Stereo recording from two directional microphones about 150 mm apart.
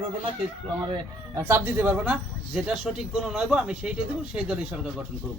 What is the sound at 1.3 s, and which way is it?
A man's voice, 15° right (ahead or behind).